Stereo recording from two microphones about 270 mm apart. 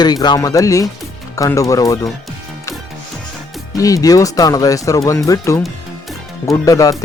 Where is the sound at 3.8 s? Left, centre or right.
Centre.